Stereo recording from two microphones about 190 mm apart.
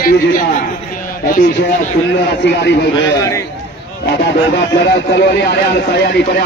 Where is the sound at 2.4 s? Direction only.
65° left (ahead or behind).